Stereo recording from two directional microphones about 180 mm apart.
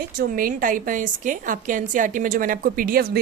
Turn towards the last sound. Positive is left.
turn(degrees=-55)  # may be behind; listen again after turning